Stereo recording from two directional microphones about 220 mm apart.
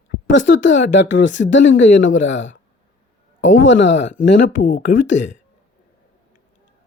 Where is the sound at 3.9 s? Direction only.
35° left (ahead or behind).